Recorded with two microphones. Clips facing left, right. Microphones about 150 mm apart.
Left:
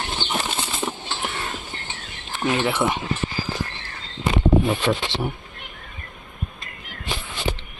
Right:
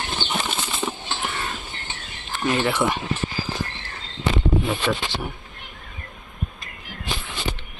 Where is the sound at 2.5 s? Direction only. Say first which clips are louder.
Even; 20° left (ahead or behind).